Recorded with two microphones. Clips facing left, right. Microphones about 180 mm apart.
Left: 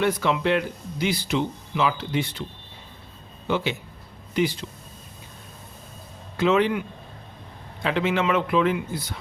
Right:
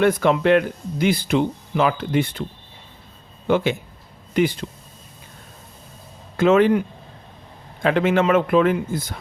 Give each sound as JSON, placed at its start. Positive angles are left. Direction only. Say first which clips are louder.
{"t": 0.0, "sound": "speech", "louder": "right 5 dB", "side_deg": -50}
{"t": 3.4, "sound": "speech", "louder": "right 6 dB", "side_deg": -50}
{"t": 6.3, "sound": "speech", "louder": "right 5 dB", "side_deg": -50}